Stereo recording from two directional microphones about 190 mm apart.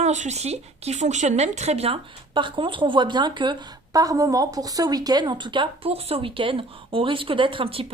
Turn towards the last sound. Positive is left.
turn(degrees=-30)  # may be behind; listen again after turning